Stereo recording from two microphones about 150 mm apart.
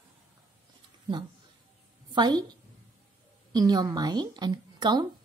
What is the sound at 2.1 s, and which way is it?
Speech, 30° right (ahead or behind).